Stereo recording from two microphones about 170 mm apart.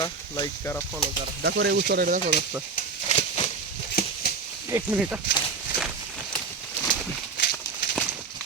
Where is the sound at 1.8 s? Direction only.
60° right (ahead or behind).